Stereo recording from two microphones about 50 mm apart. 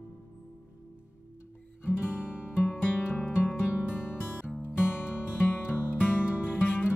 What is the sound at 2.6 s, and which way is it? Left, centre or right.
Music, left.